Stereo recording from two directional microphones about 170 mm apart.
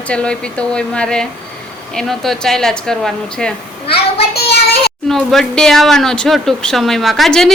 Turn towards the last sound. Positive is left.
turn(degrees=0)  # may be behind; listen again after turning